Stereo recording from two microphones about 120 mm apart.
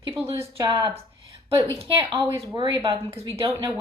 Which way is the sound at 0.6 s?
40° right (ahead or behind).